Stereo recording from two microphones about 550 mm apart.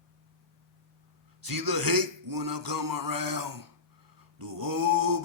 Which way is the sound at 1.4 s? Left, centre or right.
Right.